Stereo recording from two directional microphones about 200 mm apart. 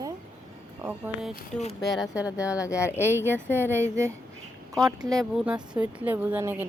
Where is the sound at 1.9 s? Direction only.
5° right (ahead or behind).